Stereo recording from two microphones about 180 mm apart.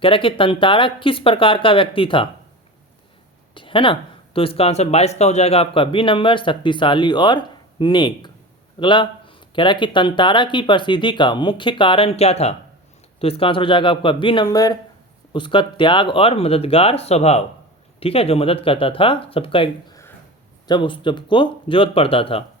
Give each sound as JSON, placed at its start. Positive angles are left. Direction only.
{"t": 0.0, "sound": "speech", "side_deg": 30}
{"t": 3.5, "sound": "a sound", "side_deg": 30}
{"t": 4.4, "sound": "speech", "side_deg": 30}